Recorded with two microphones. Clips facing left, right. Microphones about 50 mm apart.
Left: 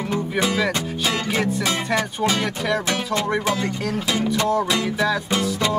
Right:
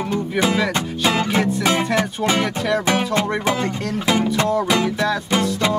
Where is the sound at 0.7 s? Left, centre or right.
Right.